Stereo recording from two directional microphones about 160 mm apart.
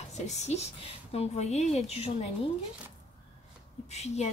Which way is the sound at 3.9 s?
40° left (ahead or behind).